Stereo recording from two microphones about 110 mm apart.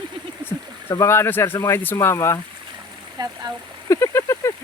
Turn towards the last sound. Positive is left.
turn(degrees=25)  # may be behind; listen again after turning